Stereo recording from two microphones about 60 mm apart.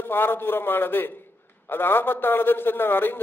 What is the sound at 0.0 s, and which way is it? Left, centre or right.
A man's voice, left.